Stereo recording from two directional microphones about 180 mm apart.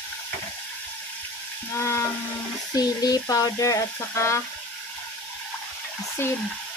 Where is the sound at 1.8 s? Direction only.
15° left (ahead or behind).